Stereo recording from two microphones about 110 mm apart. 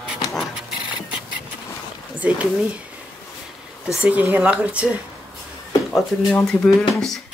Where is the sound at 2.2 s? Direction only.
10° right (ahead or behind).